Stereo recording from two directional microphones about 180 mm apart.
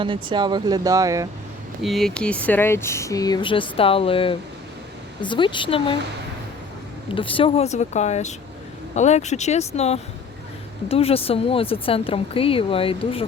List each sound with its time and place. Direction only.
0.0 s speech: 25° right (ahead or behind)
1.8 s speech: centre (ahead or behind); by 6.0 s 30° left (ahead or behind)
7.1 s speech: 30° left (ahead or behind)